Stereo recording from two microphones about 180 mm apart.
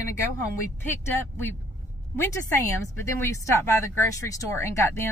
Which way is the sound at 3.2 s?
15° left (ahead or behind).